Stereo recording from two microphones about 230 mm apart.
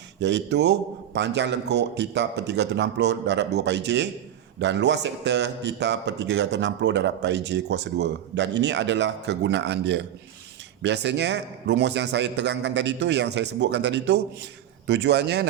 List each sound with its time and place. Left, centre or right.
0.2 s a man's voice: right